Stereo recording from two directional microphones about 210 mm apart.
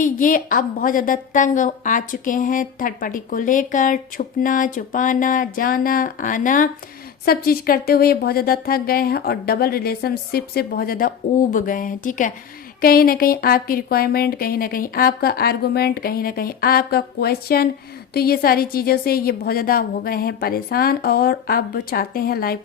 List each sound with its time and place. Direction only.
0.0 s a woman's voice: 40° left (ahead or behind)